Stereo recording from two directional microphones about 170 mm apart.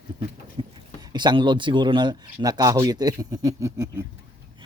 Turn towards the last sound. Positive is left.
turn(degrees=-15)  # may be behind; listen again after turning